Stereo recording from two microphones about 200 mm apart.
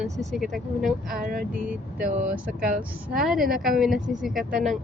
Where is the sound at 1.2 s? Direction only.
45° right (ahead or behind).